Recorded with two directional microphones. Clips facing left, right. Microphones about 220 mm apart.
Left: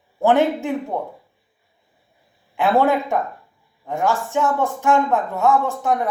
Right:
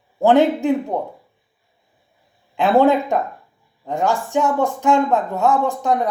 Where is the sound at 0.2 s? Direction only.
15° right (ahead or behind).